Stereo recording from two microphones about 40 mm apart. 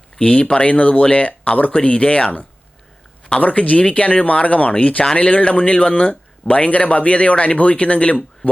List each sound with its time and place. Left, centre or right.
0.2 s speech: left
3.4 s speech: left